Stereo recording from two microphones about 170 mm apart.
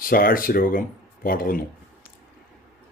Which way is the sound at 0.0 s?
55° left (ahead or behind).